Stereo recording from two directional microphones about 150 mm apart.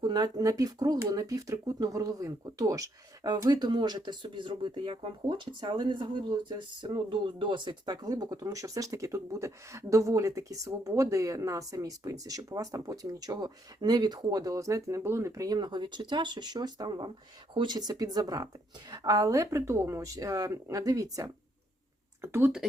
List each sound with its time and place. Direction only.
0.0 s speech: 25° right (ahead or behind); by 22.6 s 10° right (ahead or behind)